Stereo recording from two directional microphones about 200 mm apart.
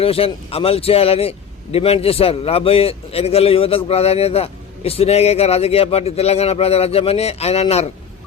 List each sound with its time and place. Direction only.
0.0 s a man's voice: 30° left (ahead or behind)